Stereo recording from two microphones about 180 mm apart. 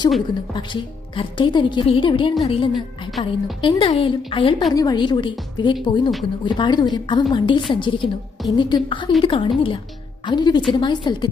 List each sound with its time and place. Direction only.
0.5 s a woman's voice: 25° left (ahead or behind)